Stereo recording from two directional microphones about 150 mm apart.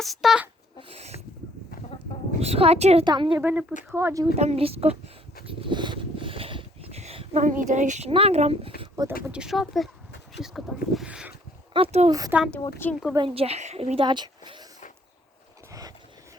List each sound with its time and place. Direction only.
0.0 s speech: centre (ahead or behind)
0.9 s speech: 45° right (ahead or behind)
2.4 s speech: 45° right (ahead or behind)
3.0 s speech: 30° right (ahead or behind)
3.4 s speech: 5° right (ahead or behind)
3.9 s speech: 20° right (ahead or behind)
4.4 s speech: 40° right (ahead or behind)
5.5 s a sound: 30° right (ahead or behind)
7.4 s speech: 60° right (ahead or behind)
9.2 s speech: 5° right (ahead or behind)
11.7 s speech: 40° right (ahead or behind)
12.3 s speech: 10° right (ahead or behind)
12.8 s speech: 15° left (ahead or behind)
13.1 s speech: 35° right (ahead or behind)